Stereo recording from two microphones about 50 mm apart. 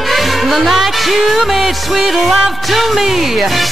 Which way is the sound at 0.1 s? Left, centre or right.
Centre.